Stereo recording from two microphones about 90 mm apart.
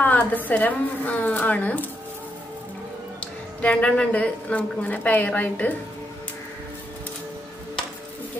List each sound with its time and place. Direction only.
0.0 s a sound: 20° left (ahead or behind)
0.5 s a woman's voice: 20° left (ahead or behind)
3.2 s a woman's voice: 15° left (ahead or behind)